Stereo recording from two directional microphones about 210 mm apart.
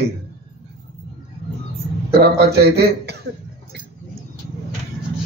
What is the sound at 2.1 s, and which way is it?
A man's voice, 50° right (ahead or behind).